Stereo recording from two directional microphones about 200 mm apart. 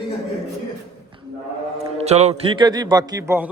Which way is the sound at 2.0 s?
35° right (ahead or behind).